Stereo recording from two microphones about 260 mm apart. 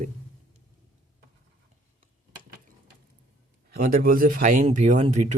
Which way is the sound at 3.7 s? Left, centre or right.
Right.